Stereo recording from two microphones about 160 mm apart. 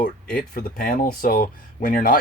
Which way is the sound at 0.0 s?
65° left (ahead or behind).